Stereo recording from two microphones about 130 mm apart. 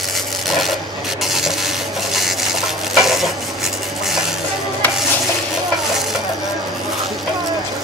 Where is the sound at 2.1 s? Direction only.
Centre (ahead or behind).